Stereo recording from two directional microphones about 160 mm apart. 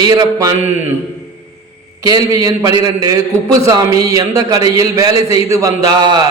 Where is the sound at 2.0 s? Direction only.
25° right (ahead or behind).